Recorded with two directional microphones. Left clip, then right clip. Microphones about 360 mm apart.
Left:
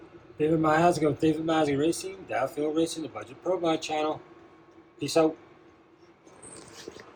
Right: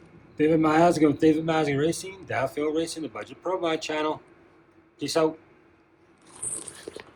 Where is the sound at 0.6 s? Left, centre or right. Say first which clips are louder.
Right 2 dB; centre.